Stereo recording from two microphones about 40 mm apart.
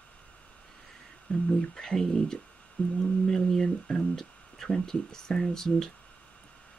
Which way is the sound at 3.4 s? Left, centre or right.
Centre.